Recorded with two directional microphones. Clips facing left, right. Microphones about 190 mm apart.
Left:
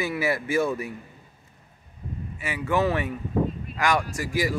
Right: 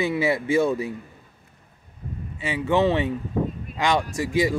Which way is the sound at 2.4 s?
25° right (ahead or behind).